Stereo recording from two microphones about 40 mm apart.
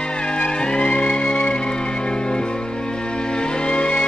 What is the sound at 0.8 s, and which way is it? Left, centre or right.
Music, left.